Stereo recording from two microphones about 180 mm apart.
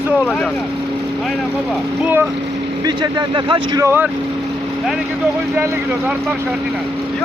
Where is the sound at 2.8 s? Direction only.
25° right (ahead or behind).